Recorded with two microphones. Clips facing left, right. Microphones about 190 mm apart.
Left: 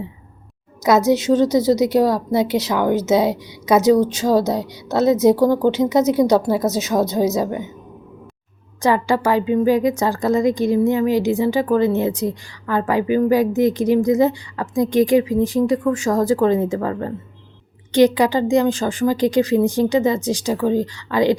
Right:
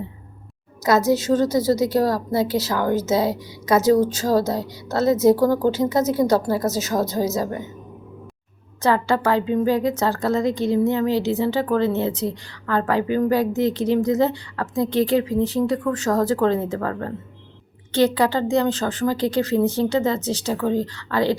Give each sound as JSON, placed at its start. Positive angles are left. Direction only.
{"t": 0.9, "sound": "a woman's voice", "side_deg": 20}
{"t": 8.8, "sound": "a woman's voice", "side_deg": 15}